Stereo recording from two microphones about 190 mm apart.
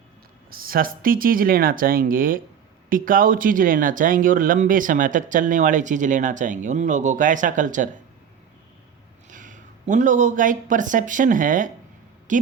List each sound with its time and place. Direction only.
0.5 s speech: 50° right (ahead or behind)
9.3 s speech: 45° right (ahead or behind)